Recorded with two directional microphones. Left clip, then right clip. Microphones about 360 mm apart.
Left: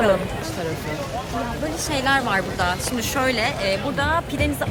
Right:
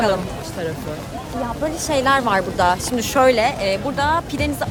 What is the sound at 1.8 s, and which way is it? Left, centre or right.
Speech, right.